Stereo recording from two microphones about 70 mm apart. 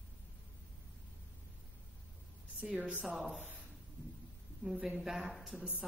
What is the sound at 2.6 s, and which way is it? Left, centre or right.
Speech, centre.